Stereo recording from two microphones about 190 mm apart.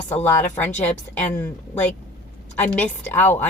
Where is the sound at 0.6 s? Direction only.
10° left (ahead or behind).